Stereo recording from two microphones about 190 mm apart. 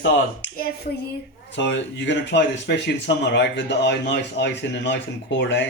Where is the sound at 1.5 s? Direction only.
70° left (ahead or behind).